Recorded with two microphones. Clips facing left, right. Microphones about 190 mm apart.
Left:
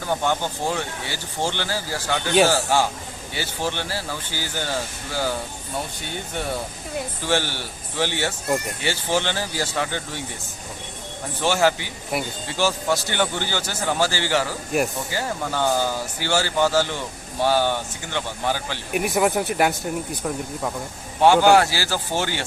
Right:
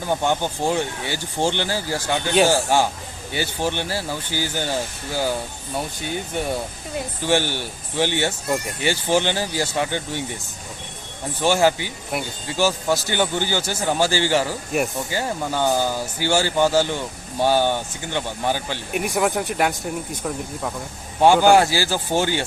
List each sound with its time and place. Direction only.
0.1 s speech: 15° right (ahead or behind)
7.3 s a man's voice: 15° right (ahead or behind)
11.4 s speech: 15° right (ahead or behind)
12.1 s speech: centre (ahead or behind)
12.5 s speech: 10° right (ahead or behind)
18.9 s speech: centre (ahead or behind)
21.2 s speech: 10° right (ahead or behind)